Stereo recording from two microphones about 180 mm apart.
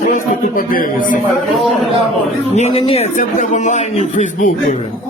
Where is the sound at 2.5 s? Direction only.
35° left (ahead or behind).